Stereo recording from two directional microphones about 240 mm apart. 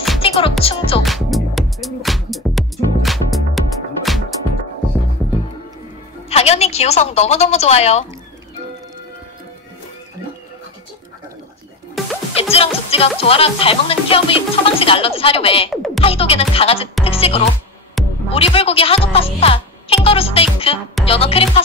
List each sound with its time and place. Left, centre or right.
0.2 s speech: left
1.0 s music: centre
6.2 s a woman's voice: left
12.0 s music: centre
12.4 s speech: left
15.7 s music: centre
16.0 s speech: left
18.0 s music: centre
18.3 s speech: left